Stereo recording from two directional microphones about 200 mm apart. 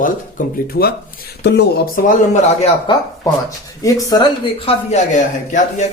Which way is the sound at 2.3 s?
35° left (ahead or behind).